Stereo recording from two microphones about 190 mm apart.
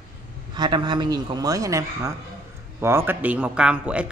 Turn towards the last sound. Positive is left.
turn(degrees=-5)  # may be behind; listen again after turning